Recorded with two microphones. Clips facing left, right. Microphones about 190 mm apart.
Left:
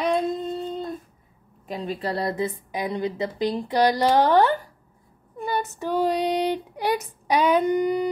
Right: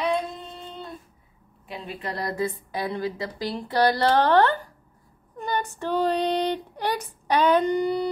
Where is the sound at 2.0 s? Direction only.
30° left (ahead or behind); by 4.7 s 10° left (ahead or behind).